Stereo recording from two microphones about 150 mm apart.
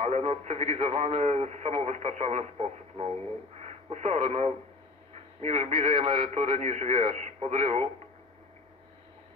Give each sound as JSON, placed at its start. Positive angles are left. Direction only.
{"t": 0.0, "sound": "speech", "side_deg": -45}